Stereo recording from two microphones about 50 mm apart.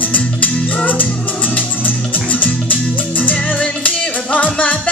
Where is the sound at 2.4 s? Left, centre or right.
Left.